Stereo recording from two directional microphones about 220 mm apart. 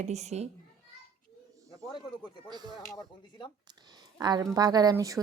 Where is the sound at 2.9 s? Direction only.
20° left (ahead or behind).